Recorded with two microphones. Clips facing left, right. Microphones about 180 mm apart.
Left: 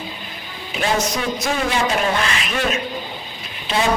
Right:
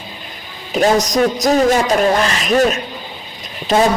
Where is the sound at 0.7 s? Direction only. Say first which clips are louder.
Right 7 dB; 40° right (ahead or behind).